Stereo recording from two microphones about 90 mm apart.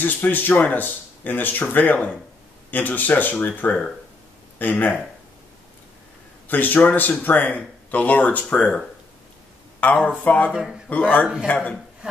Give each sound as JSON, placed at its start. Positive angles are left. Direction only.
{"t": 0.0, "sound": "speech", "side_deg": 20}
{"t": 6.4, "sound": "speech", "side_deg": 20}
{"t": 10.0, "sound": "speech", "side_deg": 15}
{"t": 10.5, "sound": "a man's voice", "side_deg": -5}
{"t": 10.9, "sound": "speech", "side_deg": 15}